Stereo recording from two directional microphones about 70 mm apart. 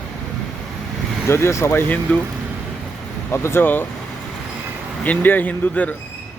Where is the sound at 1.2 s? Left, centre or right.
Left.